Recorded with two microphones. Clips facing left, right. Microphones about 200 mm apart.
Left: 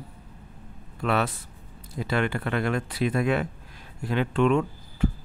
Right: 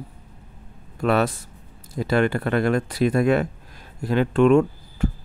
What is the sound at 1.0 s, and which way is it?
Speech, 40° right (ahead or behind).